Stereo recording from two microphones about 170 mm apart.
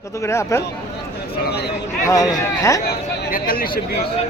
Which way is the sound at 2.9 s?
65° left (ahead or behind).